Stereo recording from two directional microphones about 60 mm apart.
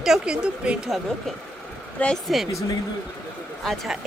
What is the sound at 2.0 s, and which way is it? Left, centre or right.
Speech, left.